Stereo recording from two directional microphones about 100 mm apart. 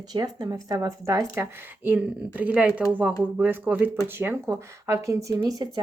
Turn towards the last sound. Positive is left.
turn(degrees=-35)  # may be behind; listen again after turning